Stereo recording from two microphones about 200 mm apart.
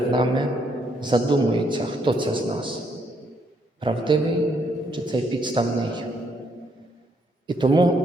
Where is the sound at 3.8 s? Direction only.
25° right (ahead or behind).